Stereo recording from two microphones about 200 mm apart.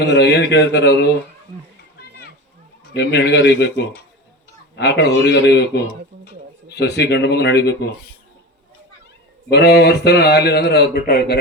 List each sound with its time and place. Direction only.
0.0 s a man's voice: 60° left (ahead or behind)
2.9 s a man's voice: 60° left (ahead or behind)
9.5 s a man's voice: 55° left (ahead or behind)